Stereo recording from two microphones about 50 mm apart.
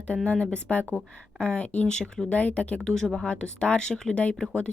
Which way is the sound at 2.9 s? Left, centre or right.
Centre.